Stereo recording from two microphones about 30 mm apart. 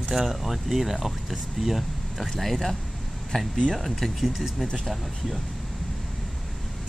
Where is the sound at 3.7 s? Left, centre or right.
Centre.